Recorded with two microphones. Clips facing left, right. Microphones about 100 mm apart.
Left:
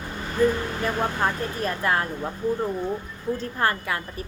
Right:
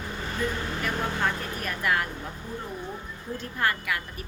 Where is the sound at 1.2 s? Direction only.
30° left (ahead or behind).